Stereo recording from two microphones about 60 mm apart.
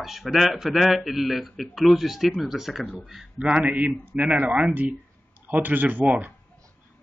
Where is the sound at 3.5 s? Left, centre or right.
Right.